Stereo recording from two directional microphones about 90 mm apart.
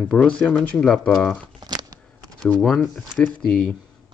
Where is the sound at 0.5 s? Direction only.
20° left (ahead or behind).